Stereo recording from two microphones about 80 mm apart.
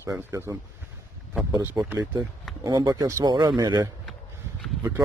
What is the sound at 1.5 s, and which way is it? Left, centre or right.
Speech, right.